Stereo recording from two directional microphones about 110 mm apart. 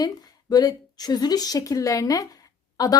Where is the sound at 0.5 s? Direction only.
35° left (ahead or behind).